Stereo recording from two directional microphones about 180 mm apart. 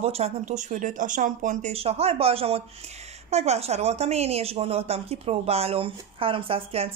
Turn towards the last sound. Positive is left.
turn(degrees=-30)  # may be behind; listen again after turning